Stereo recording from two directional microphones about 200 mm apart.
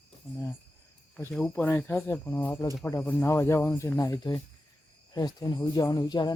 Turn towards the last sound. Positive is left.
turn(degrees=20)  # may be behind; listen again after turning